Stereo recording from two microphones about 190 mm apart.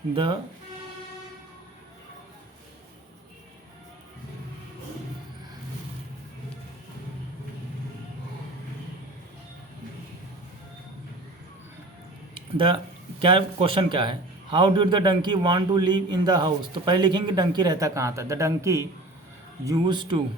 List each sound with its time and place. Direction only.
0.1 s speech: 30° right (ahead or behind)
12.5 s speech: 25° right (ahead or behind)